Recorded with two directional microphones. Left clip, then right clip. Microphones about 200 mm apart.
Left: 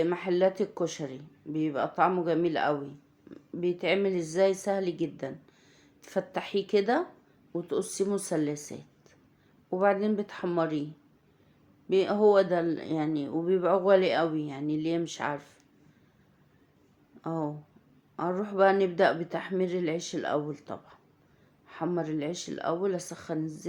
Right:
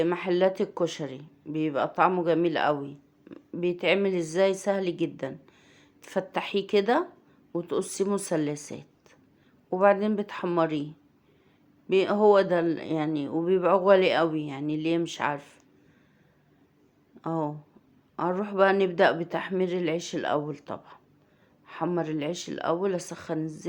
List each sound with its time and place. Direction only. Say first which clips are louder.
0.0 s speech: right 2 dB; 25° right (ahead or behind)
11.9 s speech: right 2 dB; 25° right (ahead or behind)
17.2 s speech: right 3 dB; 25° right (ahead or behind)